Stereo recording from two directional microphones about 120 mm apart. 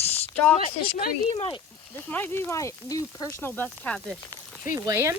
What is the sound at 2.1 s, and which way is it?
Speech, 15° left (ahead or behind).